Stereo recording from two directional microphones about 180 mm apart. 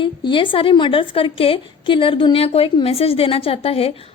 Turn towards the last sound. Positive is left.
turn(degrees=35)  # may be behind; listen again after turning